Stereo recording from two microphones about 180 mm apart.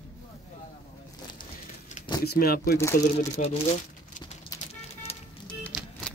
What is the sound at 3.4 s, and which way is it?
Speech, 45° left (ahead or behind).